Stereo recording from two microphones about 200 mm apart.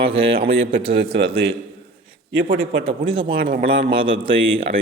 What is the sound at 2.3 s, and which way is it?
Speech, 65° right (ahead or behind).